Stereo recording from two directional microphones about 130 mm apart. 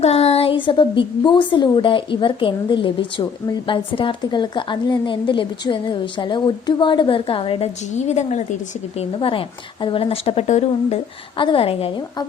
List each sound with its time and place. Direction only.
0.0 s a woman's voice: 55° left (ahead or behind)
7.9 s a woman's voice: 65° left (ahead or behind)
9.0 s a woman's voice: 45° left (ahead or behind)
11.3 s a woman's voice: 40° left (ahead or behind)